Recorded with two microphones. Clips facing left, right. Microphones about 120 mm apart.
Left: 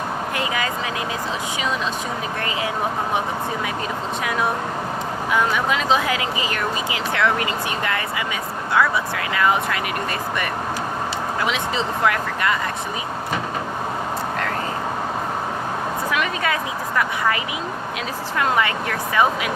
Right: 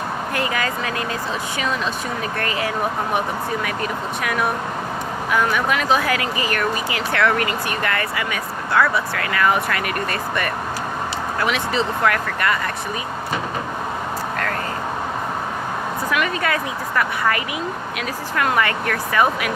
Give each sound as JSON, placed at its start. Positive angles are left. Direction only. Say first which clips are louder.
{"t": 0.3, "sound": "speech", "louder": "right 2 dB", "side_deg": 15}
{"t": 4.2, "sound": "speech", "louder": "even", "side_deg": 25}
{"t": 11.8, "sound": "speech", "louder": "right 1 dB", "side_deg": 20}
{"t": 16.1, "sound": "speech", "louder": "right 3 dB", "side_deg": 20}
{"t": 18.3, "sound": "speech", "louder": "right 1 dB", "side_deg": 20}